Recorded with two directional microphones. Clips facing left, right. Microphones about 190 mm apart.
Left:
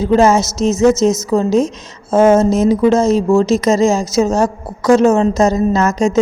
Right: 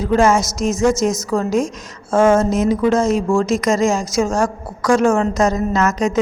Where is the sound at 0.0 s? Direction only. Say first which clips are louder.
Left 3 dB; 25° left (ahead or behind).